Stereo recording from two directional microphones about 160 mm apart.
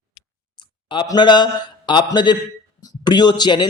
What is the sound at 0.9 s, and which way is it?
A man's voice, 30° left (ahead or behind).